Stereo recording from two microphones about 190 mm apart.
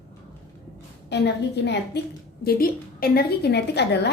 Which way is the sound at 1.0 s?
60° left (ahead or behind).